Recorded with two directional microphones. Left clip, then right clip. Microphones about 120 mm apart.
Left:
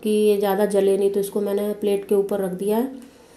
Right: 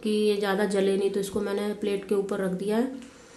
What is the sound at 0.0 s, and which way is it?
Speech, 15° left (ahead or behind).